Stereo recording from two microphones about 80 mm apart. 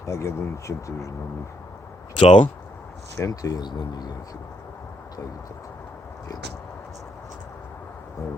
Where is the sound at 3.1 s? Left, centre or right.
Left.